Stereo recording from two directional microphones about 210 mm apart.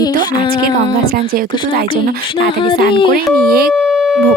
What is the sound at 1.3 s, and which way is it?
Speech, 45° right (ahead or behind).